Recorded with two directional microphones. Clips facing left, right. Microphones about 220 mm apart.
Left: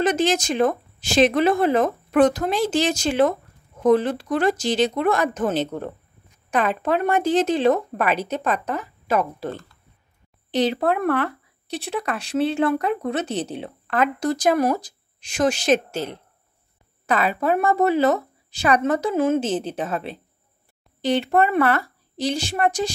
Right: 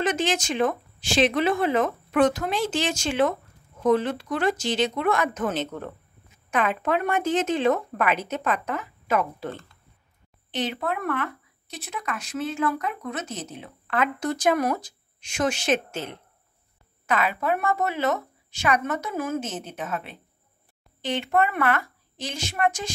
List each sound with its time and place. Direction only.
0.0 s speech: 40° left (ahead or behind)